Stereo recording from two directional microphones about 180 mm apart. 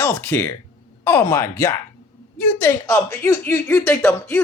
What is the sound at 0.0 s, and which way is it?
A woman's voice, 15° left (ahead or behind).